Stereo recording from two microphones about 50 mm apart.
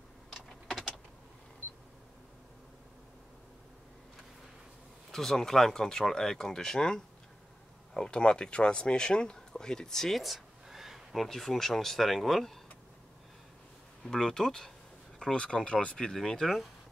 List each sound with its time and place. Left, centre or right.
0.3 s a sound: centre
5.1 s speech: centre
11.2 s speech: centre
14.0 s speech: centre
16.1 s speech: centre